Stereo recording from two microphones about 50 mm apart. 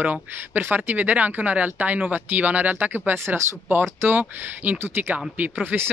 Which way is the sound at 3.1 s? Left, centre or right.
Right.